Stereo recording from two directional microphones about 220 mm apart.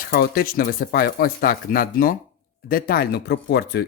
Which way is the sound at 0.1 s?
40° left (ahead or behind).